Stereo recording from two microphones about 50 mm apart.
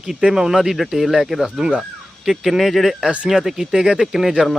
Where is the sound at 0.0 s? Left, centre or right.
Centre.